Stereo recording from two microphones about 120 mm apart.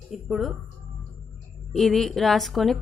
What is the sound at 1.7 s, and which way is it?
A woman's voice, 5° left (ahead or behind).